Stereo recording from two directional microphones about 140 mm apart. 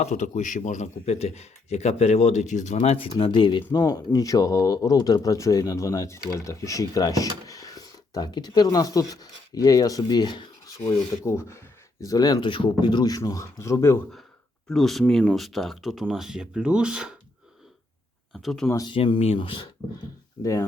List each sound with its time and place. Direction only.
0.0 s speech: 55° left (ahead or behind); by 10.8 s 35° left (ahead or behind)
10.8 s speech: 20° left (ahead or behind)
14.7 s speech: centre (ahead or behind)
18.3 s speech: centre (ahead or behind)
18.9 s speech: 40° left (ahead or behind)
20.4 s speech: 20° left (ahead or behind)